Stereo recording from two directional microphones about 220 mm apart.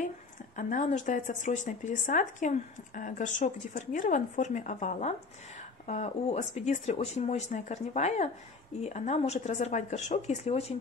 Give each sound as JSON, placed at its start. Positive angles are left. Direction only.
{"t": 0.6, "sound": "speech", "side_deg": 35}